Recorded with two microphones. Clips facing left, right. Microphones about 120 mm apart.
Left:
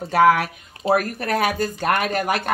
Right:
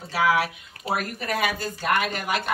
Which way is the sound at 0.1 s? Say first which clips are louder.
Left 6 dB; 50° left (ahead or behind).